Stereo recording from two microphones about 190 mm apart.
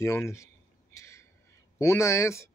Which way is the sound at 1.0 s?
15° left (ahead or behind).